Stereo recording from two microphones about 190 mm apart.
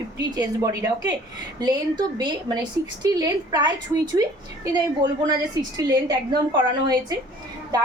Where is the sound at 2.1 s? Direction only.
20° right (ahead or behind).